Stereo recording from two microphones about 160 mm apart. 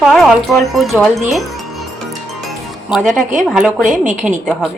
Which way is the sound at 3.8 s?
50° right (ahead or behind).